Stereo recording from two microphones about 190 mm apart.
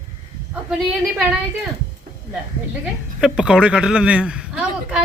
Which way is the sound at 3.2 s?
5° right (ahead or behind).